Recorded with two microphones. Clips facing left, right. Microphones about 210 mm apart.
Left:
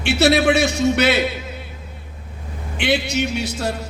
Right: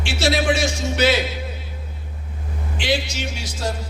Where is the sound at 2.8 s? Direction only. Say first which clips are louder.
Left 4 dB; 60° left (ahead or behind).